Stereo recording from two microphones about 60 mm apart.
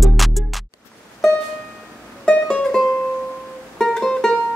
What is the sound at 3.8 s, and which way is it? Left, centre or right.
Music, centre.